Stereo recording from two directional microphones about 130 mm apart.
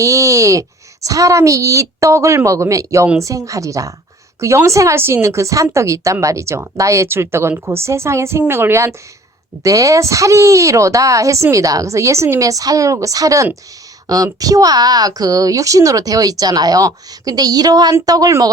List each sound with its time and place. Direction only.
0.0 s a woman's voice: 25° right (ahead or behind)